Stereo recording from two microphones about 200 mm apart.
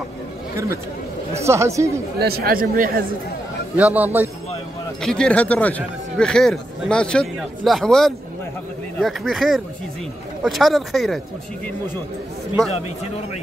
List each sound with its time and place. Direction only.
1.3 s a man's voice: 15° right (ahead or behind)
2.1 s speech: 50° right (ahead or behind)
3.7 s a man's voice: 10° right (ahead or behind)
5.0 s speech: 5° left (ahead or behind)